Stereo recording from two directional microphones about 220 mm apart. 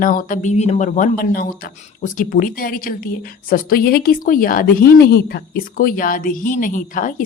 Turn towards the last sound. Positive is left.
turn(degrees=40)  # may be behind; listen again after turning